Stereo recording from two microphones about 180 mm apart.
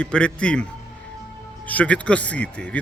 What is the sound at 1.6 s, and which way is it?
Speech, 10° left (ahead or behind).